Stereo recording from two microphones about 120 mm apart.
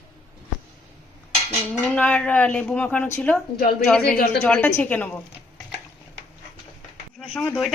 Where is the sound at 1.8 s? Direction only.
10° left (ahead or behind).